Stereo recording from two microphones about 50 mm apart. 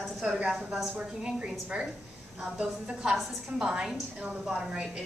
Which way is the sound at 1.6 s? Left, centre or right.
Right.